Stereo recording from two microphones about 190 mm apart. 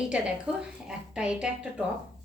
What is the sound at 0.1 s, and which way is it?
A woman's voice, 5° right (ahead or behind).